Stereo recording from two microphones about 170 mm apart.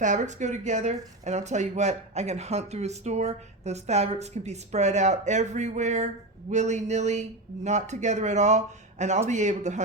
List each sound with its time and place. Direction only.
0.0 s speech: 45° right (ahead or behind)